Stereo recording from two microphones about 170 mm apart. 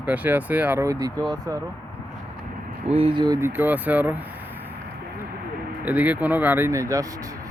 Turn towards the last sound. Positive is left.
turn(degrees=-20)  # may be behind; listen again after turning